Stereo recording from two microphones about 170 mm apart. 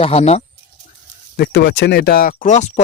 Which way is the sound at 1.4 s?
90° left.